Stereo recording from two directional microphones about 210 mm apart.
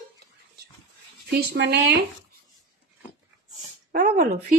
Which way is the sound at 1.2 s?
50° right (ahead or behind).